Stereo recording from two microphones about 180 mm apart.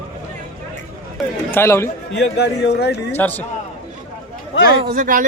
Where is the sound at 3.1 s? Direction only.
10° left (ahead or behind).